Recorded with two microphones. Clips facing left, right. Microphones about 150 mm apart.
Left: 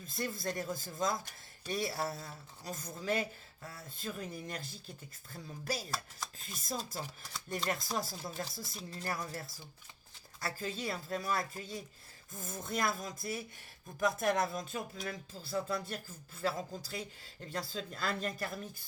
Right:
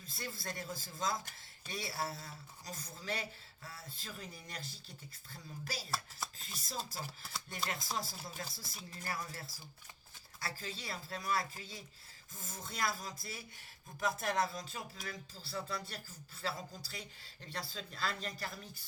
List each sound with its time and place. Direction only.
0.0 s speech: 45° left (ahead or behind)
10.4 s speech: 45° left (ahead or behind)